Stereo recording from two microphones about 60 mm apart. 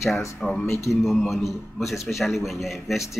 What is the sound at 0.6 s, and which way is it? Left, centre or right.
Speech, left.